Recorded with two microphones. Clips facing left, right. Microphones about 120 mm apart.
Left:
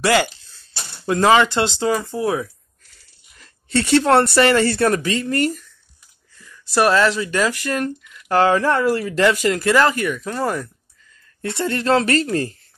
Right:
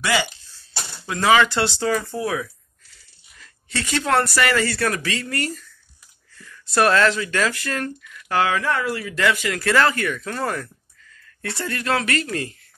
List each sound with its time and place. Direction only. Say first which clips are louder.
0.0 s speech: left 5 dB; 45° left (ahead or behind)
1.4 s speech: left 2 dB; 20° left (ahead or behind)
2.2 s speech: left 4 dB; 30° left (ahead or behind)
6.3 s a sound: right 1 dB; 15° left (ahead or behind)
6.9 s speech: left 2 dB; 20° left (ahead or behind)
8.3 s speech: left 5 dB; 35° left (ahead or behind)
9.6 s speech: left 3 dB; 20° left (ahead or behind)